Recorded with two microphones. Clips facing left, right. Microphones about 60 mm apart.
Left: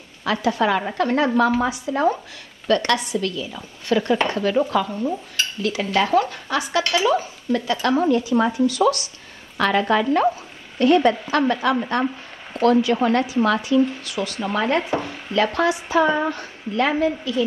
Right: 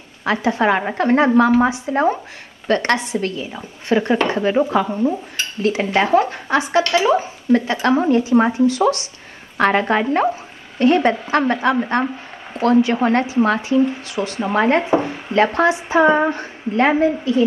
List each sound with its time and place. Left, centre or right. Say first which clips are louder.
0.2 s a woman's voice: right 3 dB; right
9.6 s a woman's voice: right 3 dB; right